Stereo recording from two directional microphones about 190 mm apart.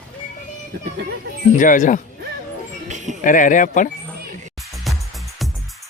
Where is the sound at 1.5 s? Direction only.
45° left (ahead or behind).